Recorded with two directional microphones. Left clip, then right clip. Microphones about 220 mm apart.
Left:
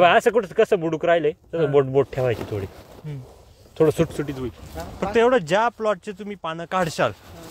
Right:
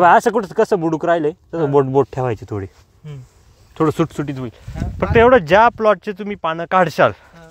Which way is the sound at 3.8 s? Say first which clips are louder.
Right 1 dB; 35° right (ahead or behind).